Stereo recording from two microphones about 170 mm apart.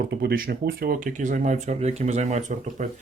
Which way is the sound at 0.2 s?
65° right (ahead or behind).